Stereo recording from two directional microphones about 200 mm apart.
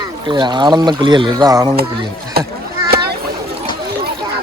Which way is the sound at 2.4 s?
50° right (ahead or behind).